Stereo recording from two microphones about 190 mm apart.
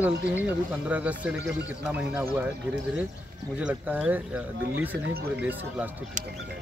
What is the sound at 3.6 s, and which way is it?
Speech, 5° right (ahead or behind).